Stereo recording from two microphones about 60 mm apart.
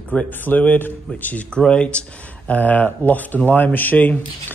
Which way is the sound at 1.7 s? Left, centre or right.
Centre.